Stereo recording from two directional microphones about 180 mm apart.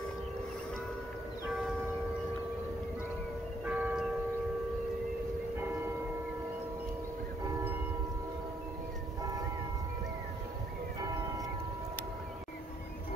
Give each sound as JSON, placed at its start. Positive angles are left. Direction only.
{"t": 3.6, "sound": "church bell", "side_deg": -10}